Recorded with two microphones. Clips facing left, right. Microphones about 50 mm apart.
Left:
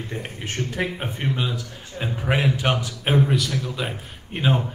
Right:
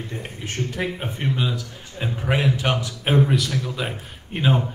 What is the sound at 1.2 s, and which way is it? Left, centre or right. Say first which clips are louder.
A man's voice: right 2 dB; centre.